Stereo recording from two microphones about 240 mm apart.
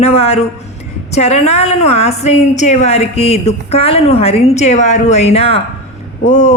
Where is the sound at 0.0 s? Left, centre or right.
Left.